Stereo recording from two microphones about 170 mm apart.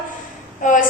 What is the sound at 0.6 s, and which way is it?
Speech, 45° left (ahead or behind).